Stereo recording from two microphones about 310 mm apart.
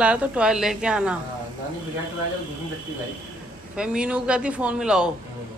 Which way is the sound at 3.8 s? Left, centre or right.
Centre.